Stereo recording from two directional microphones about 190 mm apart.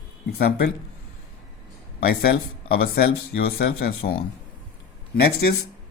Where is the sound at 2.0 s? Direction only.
55° left (ahead or behind).